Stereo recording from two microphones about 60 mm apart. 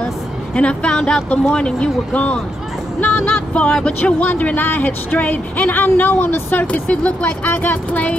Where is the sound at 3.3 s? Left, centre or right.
Centre.